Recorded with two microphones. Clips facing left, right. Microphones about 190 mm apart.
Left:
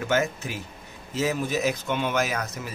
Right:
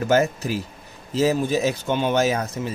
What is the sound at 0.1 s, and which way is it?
Speech, 35° right (ahead or behind).